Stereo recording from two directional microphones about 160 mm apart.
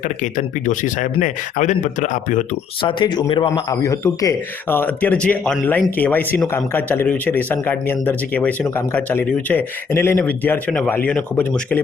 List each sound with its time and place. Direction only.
0.2 s speech: 55° left (ahead or behind)
2.8 s speech: 30° left (ahead or behind); by 11.8 s 10° left (ahead or behind)